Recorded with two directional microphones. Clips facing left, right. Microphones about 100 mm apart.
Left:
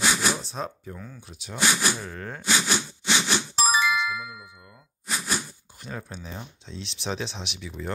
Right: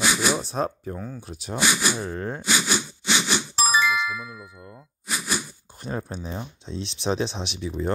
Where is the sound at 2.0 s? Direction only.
30° right (ahead or behind).